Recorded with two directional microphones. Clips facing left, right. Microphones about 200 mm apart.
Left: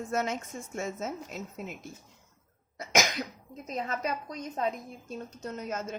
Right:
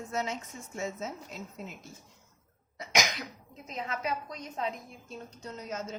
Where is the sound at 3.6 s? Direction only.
45° left (ahead or behind).